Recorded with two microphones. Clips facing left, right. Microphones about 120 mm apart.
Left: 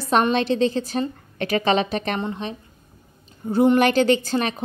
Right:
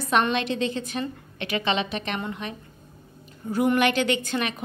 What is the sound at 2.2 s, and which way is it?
A woman's voice, 25° left (ahead or behind).